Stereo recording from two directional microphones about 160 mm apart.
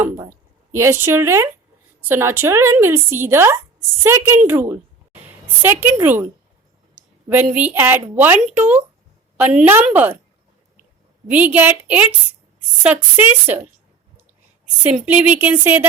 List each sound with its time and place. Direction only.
0.7 s a woman's voice: 15° right (ahead or behind)
7.3 s speech: 10° right (ahead or behind)
11.3 s speech: 10° right (ahead or behind)
14.8 s speech: 10° right (ahead or behind)